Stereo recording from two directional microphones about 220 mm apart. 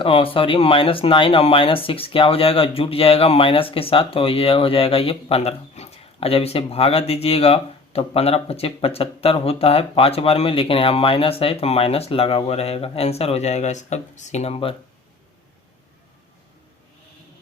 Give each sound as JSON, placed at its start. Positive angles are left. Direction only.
{"t": 0.0, "sound": "speech", "side_deg": 25}